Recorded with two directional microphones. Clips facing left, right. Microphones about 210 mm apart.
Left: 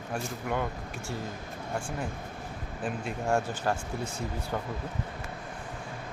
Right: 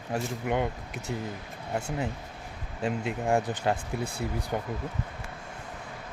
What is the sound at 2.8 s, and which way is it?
Speech, 20° right (ahead or behind).